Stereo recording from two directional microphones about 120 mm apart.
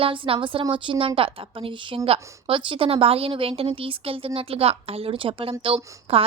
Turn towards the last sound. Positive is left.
turn(degrees=-50)  # may be behind; listen again after turning